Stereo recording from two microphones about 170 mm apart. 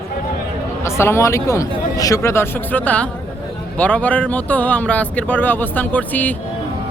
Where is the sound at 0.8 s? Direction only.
15° left (ahead or behind).